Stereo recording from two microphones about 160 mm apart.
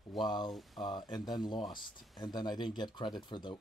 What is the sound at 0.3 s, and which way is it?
Speech, 25° left (ahead or behind).